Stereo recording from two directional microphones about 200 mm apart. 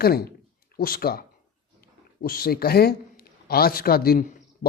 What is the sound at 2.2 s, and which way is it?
A man's voice, 50° left (ahead or behind).